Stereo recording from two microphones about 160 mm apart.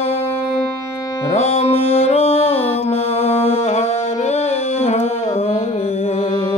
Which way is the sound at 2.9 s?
40° left (ahead or behind).